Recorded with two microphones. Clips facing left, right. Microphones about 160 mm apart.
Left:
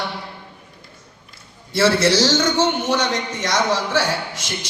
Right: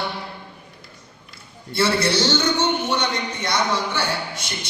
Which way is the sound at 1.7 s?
90° left.